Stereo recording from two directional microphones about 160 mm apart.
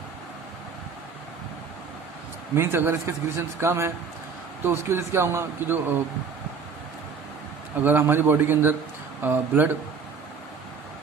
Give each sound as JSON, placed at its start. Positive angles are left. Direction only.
{"t": 2.6, "sound": "a man's voice", "side_deg": -15}
{"t": 7.9, "sound": "a man's voice", "side_deg": -10}